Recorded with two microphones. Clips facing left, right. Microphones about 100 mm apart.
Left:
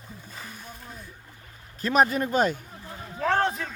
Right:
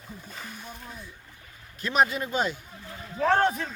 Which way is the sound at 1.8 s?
40° left (ahead or behind).